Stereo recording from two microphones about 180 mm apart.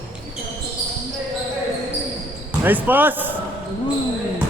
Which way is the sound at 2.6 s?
10° right (ahead or behind).